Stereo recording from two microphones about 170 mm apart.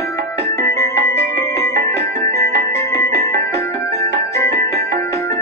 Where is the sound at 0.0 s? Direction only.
20° left (ahead or behind).